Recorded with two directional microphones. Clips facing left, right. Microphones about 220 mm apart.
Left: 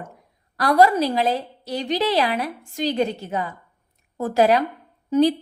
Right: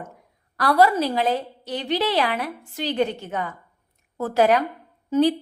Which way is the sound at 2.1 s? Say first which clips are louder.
Left 2 dB; 40° left (ahead or behind).